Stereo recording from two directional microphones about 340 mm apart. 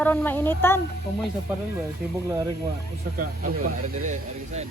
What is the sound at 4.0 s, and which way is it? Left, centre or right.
Speech, right.